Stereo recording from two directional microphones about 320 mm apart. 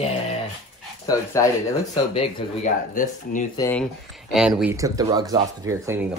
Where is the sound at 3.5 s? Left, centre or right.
Centre.